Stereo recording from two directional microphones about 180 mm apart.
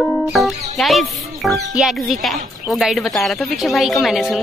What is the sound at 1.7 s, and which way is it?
Speech, centre (ahead or behind).